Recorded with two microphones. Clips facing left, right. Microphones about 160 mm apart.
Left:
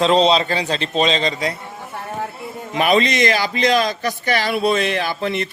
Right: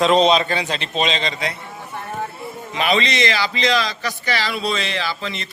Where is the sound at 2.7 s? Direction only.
50° left (ahead or behind).